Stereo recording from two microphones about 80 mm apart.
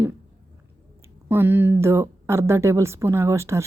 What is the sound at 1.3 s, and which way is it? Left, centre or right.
Speech, right.